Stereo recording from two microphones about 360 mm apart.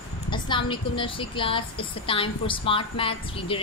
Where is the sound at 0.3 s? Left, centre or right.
Centre.